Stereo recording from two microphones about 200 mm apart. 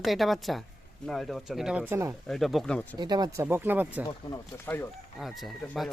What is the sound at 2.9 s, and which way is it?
Speech, 20° right (ahead or behind).